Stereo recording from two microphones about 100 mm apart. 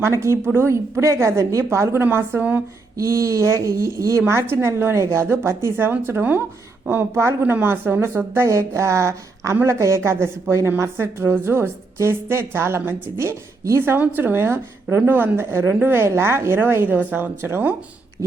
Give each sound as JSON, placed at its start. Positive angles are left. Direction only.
{"t": 0.0, "sound": "a woman's voice", "side_deg": -30}
{"t": 3.0, "sound": "a woman's voice", "side_deg": -30}